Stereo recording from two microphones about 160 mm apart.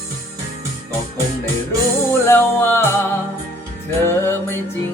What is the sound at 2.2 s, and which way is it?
Music, 15° left (ahead or behind).